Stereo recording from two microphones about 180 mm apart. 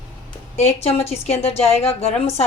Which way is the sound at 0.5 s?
35° left (ahead or behind).